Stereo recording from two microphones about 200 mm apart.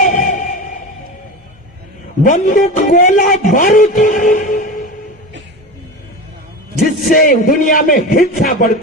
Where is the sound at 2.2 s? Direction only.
45° left (ahead or behind).